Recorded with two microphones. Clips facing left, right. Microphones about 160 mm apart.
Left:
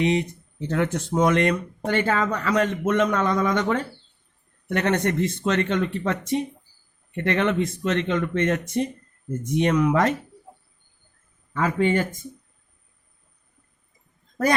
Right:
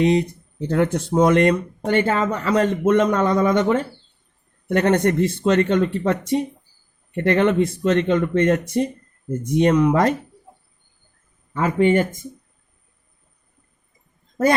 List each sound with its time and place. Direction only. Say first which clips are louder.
0.0 s speech: right 5 dB; 40° right (ahead or behind)
11.5 s speech: right 4 dB; 25° right (ahead or behind)